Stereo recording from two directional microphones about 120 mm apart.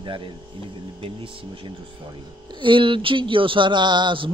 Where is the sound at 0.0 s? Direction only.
45° right (ahead or behind).